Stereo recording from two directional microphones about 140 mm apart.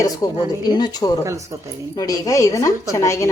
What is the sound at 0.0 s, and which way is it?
A woman's voice, 25° left (ahead or behind).